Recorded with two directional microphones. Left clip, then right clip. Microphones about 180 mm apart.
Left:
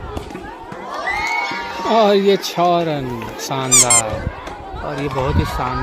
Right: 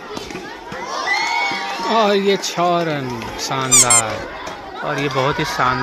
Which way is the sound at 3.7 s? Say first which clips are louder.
Even; centre (ahead or behind).